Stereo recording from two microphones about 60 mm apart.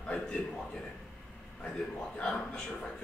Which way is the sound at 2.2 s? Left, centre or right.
Centre.